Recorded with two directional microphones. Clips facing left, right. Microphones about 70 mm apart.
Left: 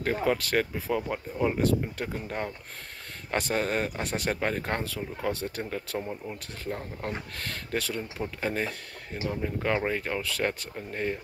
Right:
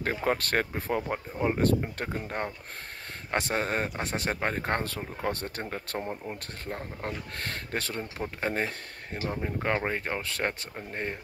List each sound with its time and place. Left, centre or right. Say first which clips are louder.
0.2 s speech: even; right
1.0 s speech: left 1 dB; right
1.6 s speech: even; right
5.9 s speech: even; right